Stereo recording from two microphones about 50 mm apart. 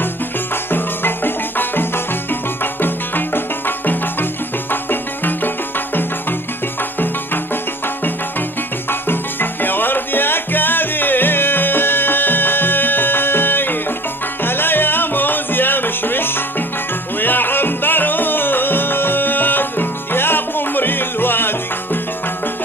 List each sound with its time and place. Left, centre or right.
0.7 s music: left
9.0 s music: left